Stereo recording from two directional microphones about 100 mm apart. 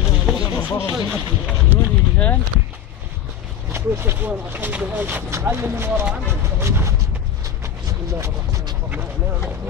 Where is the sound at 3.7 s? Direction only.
25° right (ahead or behind).